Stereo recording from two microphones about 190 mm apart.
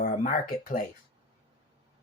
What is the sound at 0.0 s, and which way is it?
Speech, 45° left (ahead or behind).